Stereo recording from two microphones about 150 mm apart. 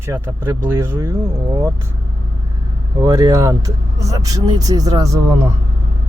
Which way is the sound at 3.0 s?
25° right (ahead or behind).